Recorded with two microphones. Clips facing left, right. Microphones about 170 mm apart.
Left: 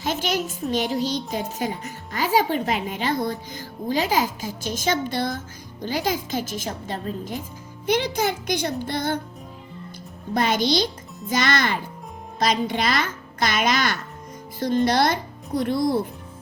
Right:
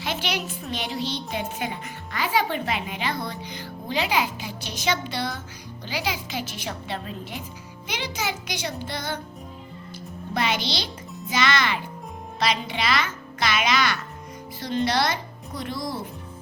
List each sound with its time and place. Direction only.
0.0 s a child's voice: 45° left (ahead or behind)
7.9 s a child's voice: 55° left (ahead or behind)
10.3 s a child's voice: 50° left (ahead or behind)